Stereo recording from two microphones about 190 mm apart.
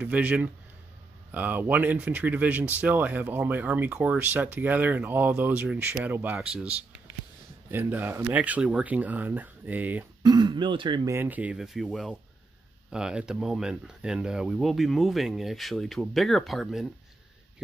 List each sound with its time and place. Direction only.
0.0 s speech: 10° right (ahead or behind)
10.2 s speech: 25° right (ahead or behind)
11.1 s speech: 10° right (ahead or behind)